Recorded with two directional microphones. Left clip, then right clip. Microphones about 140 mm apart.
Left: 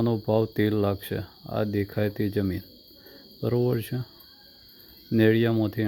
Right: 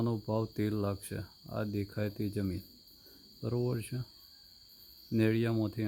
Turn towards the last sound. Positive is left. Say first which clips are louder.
# left 9 dB
turn(degrees=20)  # may be behind; listen again after turning